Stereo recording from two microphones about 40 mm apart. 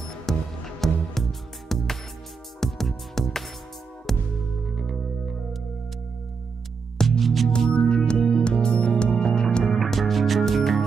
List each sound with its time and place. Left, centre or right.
0.3 s music: centre
7.0 s music: centre
7.7 s music: left
9.8 s music: centre